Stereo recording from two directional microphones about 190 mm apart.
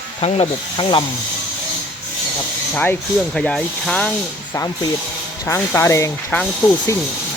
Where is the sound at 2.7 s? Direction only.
10° left (ahead or behind).